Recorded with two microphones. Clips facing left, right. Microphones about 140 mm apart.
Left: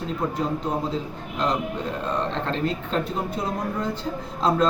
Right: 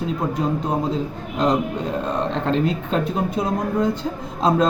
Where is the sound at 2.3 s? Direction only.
15° right (ahead or behind).